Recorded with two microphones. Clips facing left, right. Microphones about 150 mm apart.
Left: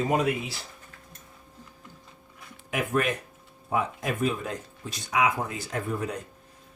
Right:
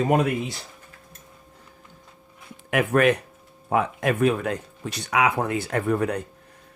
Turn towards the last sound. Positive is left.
turn(degrees=-65)  # may be behind; listen again after turning